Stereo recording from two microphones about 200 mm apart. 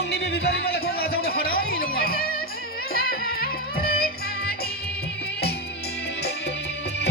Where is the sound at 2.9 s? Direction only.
45° left (ahead or behind).